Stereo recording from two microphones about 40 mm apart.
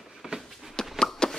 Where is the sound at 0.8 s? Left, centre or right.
Centre.